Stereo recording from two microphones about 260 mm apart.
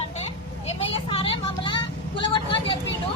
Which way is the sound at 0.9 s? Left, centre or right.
Centre.